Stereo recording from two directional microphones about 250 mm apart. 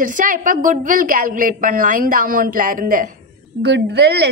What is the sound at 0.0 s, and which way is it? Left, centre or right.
A woman's voice, right.